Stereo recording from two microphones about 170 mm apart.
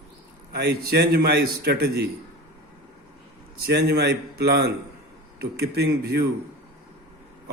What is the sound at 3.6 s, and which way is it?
A man's voice, 75° right (ahead or behind).